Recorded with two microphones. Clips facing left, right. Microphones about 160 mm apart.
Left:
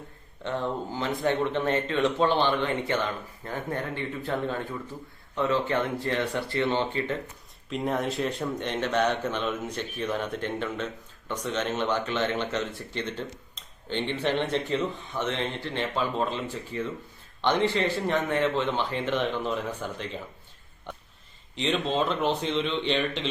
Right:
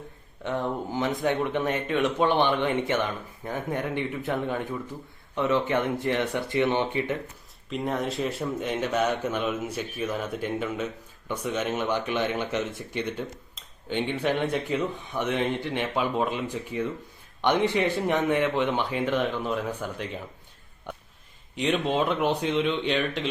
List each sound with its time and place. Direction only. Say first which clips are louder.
0.4 s speech: right 1 dB; 15° right (ahead or behind)
7.7 s speech: even; centre (ahead or behind)
21.5 s speech: right 2 dB; 10° right (ahead or behind)